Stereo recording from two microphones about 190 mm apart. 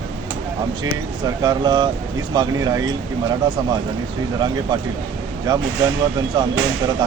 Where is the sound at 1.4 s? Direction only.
20° right (ahead or behind).